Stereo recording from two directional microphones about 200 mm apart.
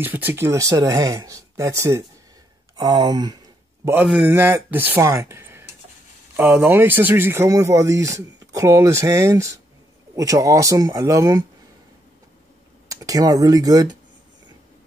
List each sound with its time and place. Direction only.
0.0 s speech: 10° right (ahead or behind)
3.8 s speech: 10° right (ahead or behind)
12.8 s speech: 15° right (ahead or behind)